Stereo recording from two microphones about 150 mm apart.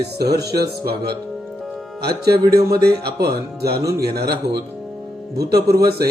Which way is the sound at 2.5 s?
20° right (ahead or behind).